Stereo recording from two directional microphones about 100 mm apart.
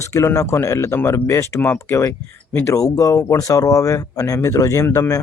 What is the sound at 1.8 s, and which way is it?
Speech, 25° left (ahead or behind).